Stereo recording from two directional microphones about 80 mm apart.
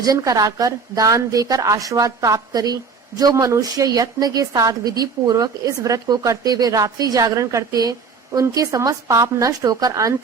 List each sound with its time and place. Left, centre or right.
0.0 s a woman's voice: right